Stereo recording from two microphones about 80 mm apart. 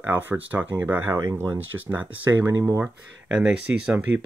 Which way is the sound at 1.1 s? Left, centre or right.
Right.